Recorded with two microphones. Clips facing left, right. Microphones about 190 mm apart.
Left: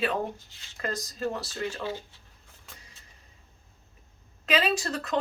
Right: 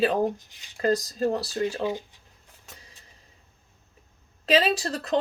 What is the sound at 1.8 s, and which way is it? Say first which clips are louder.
Speech: right 6 dB; 15° right (ahead or behind).